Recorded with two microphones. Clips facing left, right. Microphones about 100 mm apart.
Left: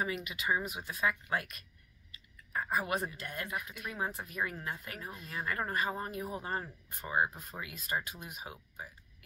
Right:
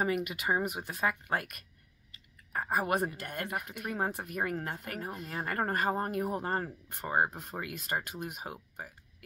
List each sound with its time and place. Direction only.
0.0 s a woman's voice: 55° right (ahead or behind)